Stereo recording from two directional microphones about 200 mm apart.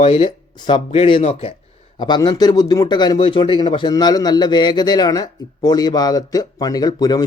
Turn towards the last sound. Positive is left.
turn(degrees=20)  # may be behind; listen again after turning